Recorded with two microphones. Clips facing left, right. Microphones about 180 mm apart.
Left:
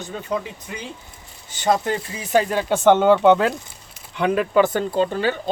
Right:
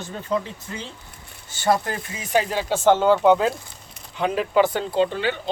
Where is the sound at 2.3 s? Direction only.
50° left (ahead or behind); by 3.5 s 65° left (ahead or behind).